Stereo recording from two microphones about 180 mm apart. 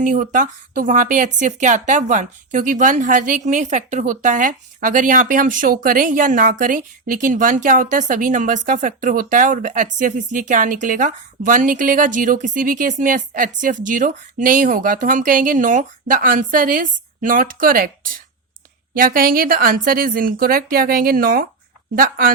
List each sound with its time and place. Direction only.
0.0 s speech: 45° right (ahead or behind)
18.9 s speech: 50° right (ahead or behind)